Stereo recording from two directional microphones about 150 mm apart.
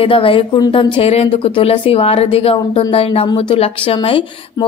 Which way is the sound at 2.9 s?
40° left (ahead or behind).